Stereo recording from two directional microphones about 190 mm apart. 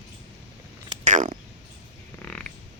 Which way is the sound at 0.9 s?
40° right (ahead or behind).